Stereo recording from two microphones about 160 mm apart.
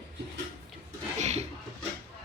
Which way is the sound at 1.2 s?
45° right (ahead or behind).